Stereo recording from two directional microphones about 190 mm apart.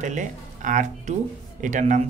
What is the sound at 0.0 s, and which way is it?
Speech, 40° right (ahead or behind).